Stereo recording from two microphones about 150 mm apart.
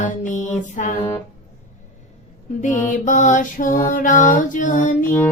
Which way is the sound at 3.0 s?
55° left (ahead or behind).